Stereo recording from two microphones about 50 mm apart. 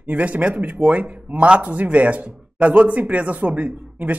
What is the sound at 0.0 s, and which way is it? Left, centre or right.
Speech, right.